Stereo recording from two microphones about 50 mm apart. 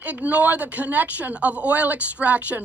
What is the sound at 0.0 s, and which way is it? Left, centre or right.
A woman's voice, right.